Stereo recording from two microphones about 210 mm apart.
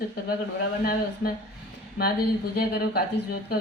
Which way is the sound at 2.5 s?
50° left (ahead or behind).